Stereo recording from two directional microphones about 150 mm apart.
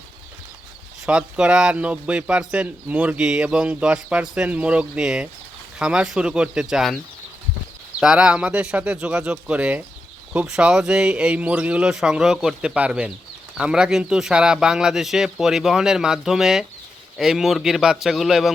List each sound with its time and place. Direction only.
1.0 s speech: 5° right (ahead or behind)